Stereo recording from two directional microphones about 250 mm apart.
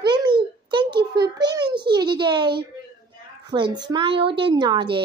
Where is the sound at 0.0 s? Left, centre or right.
Centre.